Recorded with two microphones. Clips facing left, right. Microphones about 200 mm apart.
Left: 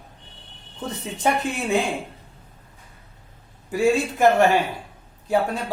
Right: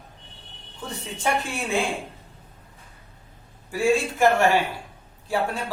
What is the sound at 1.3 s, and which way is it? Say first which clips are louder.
Speech: left 3 dB; 20° left (ahead or behind).